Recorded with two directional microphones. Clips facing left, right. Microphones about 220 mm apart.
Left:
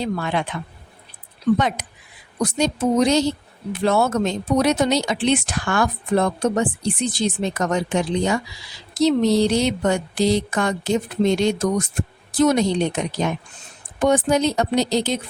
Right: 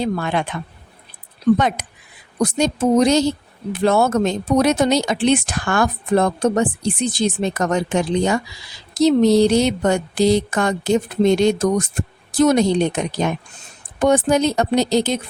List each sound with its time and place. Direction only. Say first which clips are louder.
0.0 s speech: right 2 dB; 50° right (ahead or behind)
1.5 s speech: right 2 dB; 50° right (ahead or behind)
14.0 s speech: right 2 dB; 50° right (ahead or behind)